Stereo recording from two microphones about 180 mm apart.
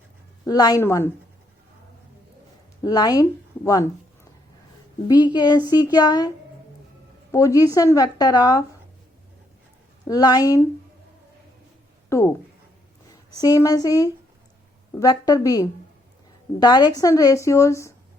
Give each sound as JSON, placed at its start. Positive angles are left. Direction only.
{"t": 0.4, "sound": "a woman's voice", "side_deg": 20}
{"t": 2.8, "sound": "speech", "side_deg": 20}
{"t": 5.0, "sound": "speech", "side_deg": 25}
{"t": 10.1, "sound": "speech", "side_deg": 20}
{"t": 12.0, "sound": "speech", "side_deg": 15}
{"t": 13.4, "sound": "speech", "side_deg": 20}